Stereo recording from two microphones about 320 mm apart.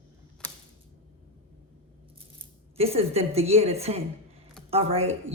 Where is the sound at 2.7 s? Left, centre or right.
Centre.